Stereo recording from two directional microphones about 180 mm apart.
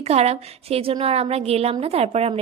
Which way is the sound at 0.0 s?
35° right (ahead or behind).